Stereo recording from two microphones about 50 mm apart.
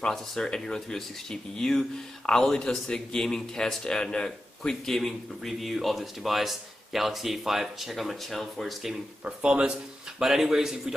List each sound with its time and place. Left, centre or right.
0.0 s speech: centre
9.2 s speech: right
10.1 s a man's voice: centre